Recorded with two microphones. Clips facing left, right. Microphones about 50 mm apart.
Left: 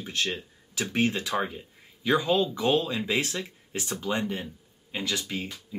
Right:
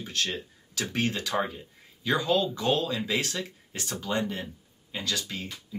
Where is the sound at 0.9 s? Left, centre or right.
Centre.